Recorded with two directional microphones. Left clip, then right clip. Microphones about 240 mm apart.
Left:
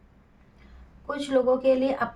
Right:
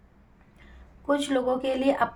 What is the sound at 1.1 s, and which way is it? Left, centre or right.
A woman's voice, right.